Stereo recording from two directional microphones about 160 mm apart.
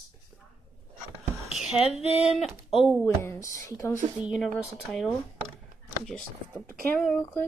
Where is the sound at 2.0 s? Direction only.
40° left (ahead or behind).